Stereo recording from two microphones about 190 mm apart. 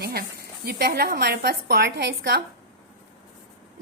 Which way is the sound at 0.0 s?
55° right (ahead or behind).